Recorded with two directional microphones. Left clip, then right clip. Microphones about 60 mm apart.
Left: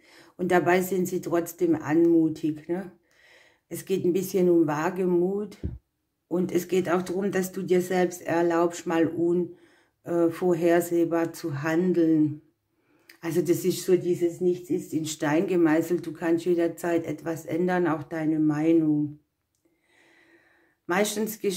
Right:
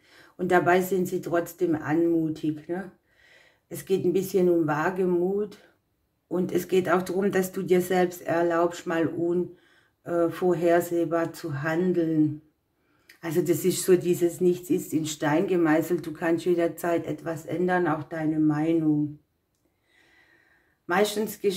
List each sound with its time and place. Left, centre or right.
0.0 s speech: left
6.7 s speech: centre
8.1 s speech: left
13.2 s speech: centre
13.8 s speech: right
15.1 s speech: centre
15.7 s speech: centre
17.0 s speech: left
20.8 s speech: left